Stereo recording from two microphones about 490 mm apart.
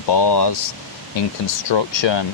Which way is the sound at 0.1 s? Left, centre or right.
Left.